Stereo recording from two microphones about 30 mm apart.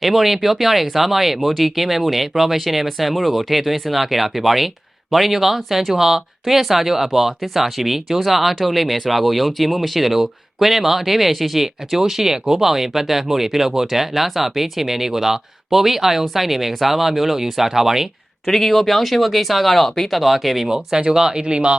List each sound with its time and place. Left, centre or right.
0.0 s speech: centre
18.4 s speech: centre
20.7 s speech: right
21.4 s speech: right